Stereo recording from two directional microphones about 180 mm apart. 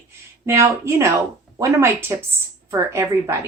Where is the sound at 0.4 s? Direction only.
15° right (ahead or behind).